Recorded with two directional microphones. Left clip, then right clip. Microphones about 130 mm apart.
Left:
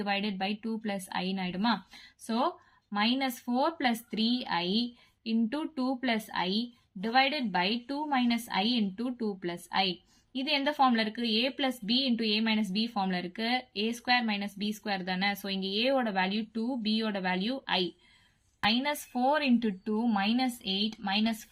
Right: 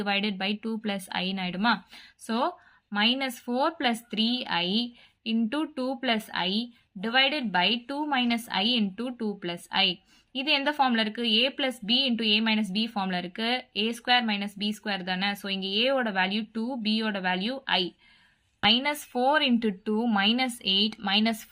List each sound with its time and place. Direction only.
0.0 s speech: 40° right (ahead or behind)
18.6 s speech: 40° right (ahead or behind)